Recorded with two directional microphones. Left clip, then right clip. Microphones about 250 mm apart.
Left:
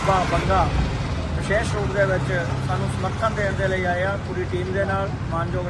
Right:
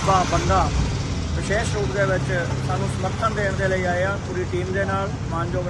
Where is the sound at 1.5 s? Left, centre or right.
Centre.